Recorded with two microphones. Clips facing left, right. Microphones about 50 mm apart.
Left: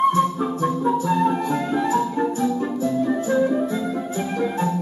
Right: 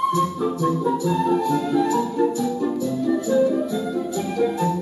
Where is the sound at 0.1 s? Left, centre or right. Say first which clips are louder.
Left 1 dB; left.